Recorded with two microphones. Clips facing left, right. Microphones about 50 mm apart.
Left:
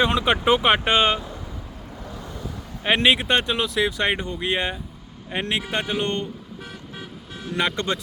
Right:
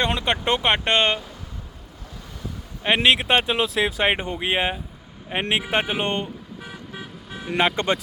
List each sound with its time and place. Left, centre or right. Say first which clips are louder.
0.0 s speech: left 3 dB; centre
2.8 s speech: even; centre
4.1 s a man's voice: right 1 dB; right
4.4 s a man's voice: right 1 dB; centre
6.6 s toot: right 1 dB; centre
7.4 s a man's voice: right 3 dB; right